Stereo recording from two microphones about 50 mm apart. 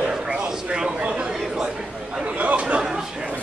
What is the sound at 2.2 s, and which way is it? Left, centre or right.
Chatter, right.